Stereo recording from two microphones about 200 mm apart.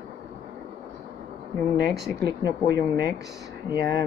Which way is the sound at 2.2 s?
20° left (ahead or behind).